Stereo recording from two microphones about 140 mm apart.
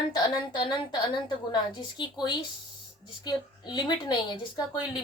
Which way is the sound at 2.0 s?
35° left (ahead or behind).